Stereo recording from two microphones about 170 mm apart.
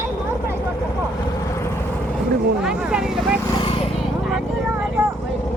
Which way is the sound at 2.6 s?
5° right (ahead or behind).